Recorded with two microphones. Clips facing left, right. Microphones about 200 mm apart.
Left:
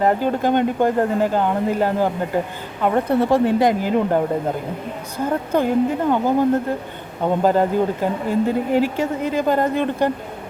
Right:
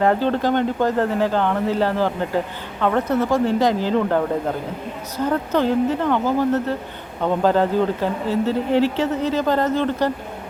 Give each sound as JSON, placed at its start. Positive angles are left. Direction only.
{"t": 0.0, "sound": "speech", "side_deg": 10}
{"t": 3.2, "sound": "speech", "side_deg": 25}
{"t": 3.7, "sound": "speech", "side_deg": 10}
{"t": 5.2, "sound": "speech", "side_deg": 10}